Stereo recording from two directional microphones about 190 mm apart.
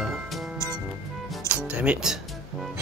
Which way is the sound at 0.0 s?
Centre (ahead or behind).